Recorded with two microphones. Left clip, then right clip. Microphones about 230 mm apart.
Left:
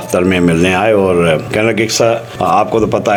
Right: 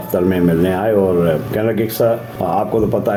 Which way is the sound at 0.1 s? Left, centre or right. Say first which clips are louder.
Left 4 dB; centre.